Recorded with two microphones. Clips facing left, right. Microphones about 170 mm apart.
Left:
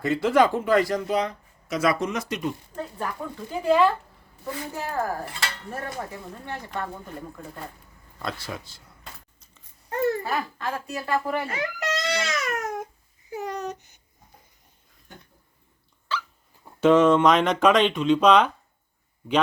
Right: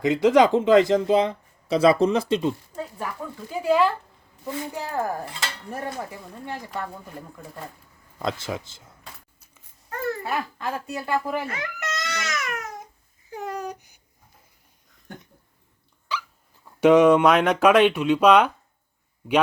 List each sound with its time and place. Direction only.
0.0 s speech: 15° right (ahead or behind)
3.5 s speech: 5° right (ahead or behind)
4.4 s speech: 20° right (ahead or behind)
6.7 s speech: 5° right (ahead or behind)
8.2 s speech: 20° right (ahead or behind)
9.9 s babbling: 20° left (ahead or behind)
10.2 s speech: 20° right (ahead or behind)
11.4 s speech: 30° left (ahead or behind)
12.5 s a sound: 50° left (ahead or behind)
13.3 s a sound: 5° right (ahead or behind)
15.1 s a sound: 55° right (ahead or behind)
16.1 s dog: 15° right (ahead or behind)
16.8 s speech: 15° right (ahead or behind)